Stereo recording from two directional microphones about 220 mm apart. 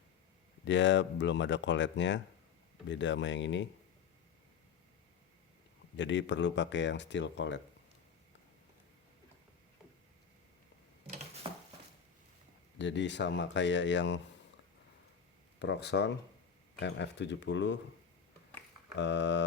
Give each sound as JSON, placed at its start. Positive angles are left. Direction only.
{"t": 0.6, "sound": "speech", "side_deg": 55}
{"t": 6.0, "sound": "speech", "side_deg": 55}
{"t": 12.8, "sound": "speech", "side_deg": 55}
{"t": 15.5, "sound": "speech", "side_deg": 50}
{"t": 18.9, "sound": "speech", "side_deg": 55}